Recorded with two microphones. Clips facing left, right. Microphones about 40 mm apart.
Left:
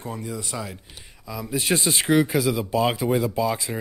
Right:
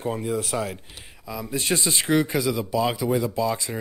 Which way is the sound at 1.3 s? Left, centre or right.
Centre.